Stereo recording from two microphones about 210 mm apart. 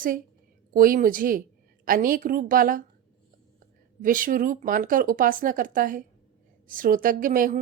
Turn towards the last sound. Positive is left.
turn(degrees=-40)  # may be behind; listen again after turning